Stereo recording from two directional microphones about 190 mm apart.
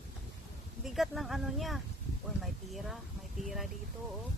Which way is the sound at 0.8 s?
Centre (ahead or behind).